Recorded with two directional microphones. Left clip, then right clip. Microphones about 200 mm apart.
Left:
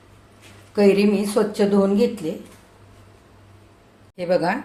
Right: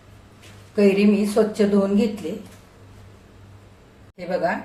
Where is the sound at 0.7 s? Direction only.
45° left (ahead or behind).